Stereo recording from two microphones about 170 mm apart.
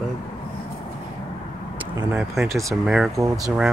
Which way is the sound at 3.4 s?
5° right (ahead or behind).